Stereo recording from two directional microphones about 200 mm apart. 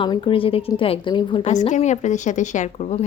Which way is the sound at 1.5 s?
35° left (ahead or behind).